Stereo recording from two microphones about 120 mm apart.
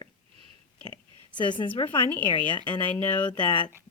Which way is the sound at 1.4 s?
40° left (ahead or behind).